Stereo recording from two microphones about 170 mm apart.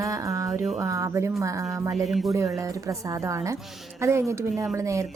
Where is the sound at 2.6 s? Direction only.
20° right (ahead or behind).